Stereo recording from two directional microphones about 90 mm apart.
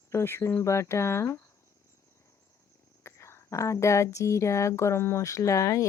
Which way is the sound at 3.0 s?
30° left (ahead or behind).